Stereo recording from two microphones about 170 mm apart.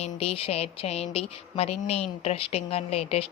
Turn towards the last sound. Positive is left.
turn(degrees=35)  # may be behind; listen again after turning